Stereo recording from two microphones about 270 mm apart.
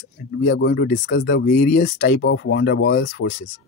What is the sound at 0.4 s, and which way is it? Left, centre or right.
Speech, left.